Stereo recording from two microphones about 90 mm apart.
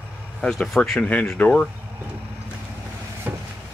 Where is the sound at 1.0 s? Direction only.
15° left (ahead or behind).